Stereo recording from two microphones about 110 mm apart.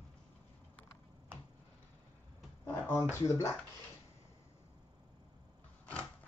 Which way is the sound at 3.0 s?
30° left (ahead or behind).